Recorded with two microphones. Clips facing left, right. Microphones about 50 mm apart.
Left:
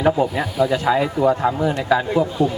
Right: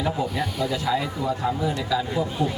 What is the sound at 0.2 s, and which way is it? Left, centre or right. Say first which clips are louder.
Speech: left 7 dB; left.